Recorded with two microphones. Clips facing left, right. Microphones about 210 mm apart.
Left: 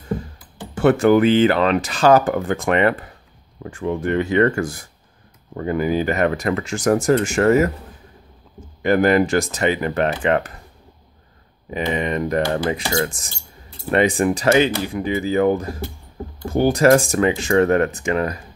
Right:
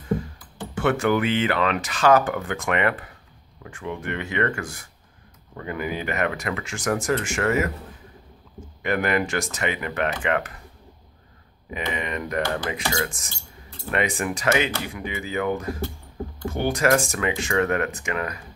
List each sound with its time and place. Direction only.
0.7 s speech: 35° left (ahead or behind)
8.8 s speech: 35° left (ahead or behind)
11.7 s speech: 35° left (ahead or behind)